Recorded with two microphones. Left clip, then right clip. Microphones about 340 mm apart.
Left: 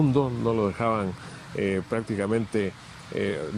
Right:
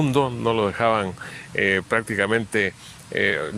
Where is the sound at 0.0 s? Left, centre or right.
Right.